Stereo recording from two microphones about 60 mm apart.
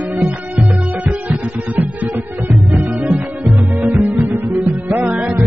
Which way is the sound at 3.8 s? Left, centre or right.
Right.